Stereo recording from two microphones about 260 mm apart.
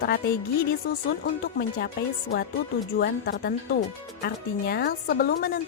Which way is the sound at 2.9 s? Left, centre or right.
Left.